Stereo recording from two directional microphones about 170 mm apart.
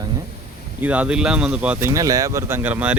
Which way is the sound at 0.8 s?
10° right (ahead or behind).